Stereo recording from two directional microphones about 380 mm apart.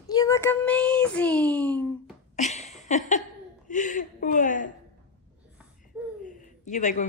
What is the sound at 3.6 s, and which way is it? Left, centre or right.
Speech, centre.